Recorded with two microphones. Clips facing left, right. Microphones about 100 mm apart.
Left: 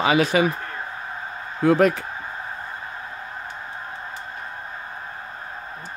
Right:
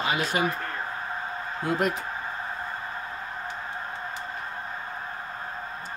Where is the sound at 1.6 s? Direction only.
90° left.